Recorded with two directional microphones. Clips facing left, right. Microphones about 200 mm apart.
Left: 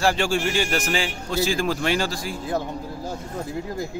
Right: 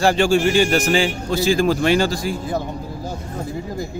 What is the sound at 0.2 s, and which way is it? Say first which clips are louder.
Speech: right 7 dB; 5° left (ahead or behind).